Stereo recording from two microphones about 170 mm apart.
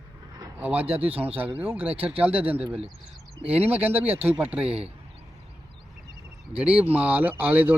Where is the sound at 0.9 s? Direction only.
35° right (ahead or behind).